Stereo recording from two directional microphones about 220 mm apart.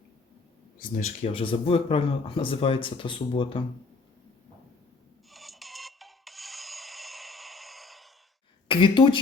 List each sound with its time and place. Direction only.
0.8 s speech: 35° left (ahead or behind)
5.3 s music: centre (ahead or behind)
8.6 s speech: 20° left (ahead or behind)